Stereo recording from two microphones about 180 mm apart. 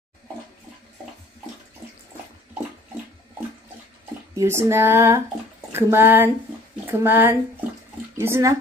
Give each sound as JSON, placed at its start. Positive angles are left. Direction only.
{"t": 4.4, "sound": "speech", "side_deg": -15}